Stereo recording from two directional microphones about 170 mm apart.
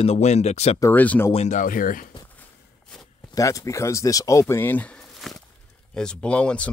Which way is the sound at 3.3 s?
20° left (ahead or behind).